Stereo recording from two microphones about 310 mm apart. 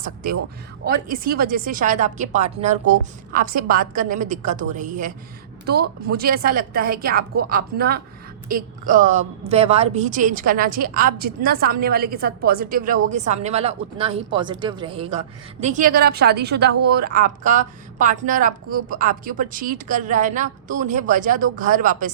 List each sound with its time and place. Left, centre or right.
0.0 s a woman's voice: right